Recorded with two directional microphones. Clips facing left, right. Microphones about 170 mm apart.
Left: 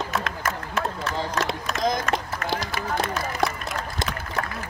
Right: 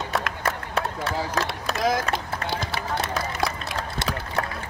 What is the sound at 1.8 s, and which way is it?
Run, 5° right (ahead or behind).